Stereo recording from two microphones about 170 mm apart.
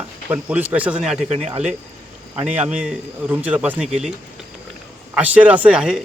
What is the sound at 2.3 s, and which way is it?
Speech, 5° right (ahead or behind).